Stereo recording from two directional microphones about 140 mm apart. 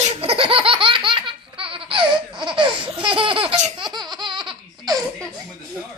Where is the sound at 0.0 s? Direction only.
45° right (ahead or behind).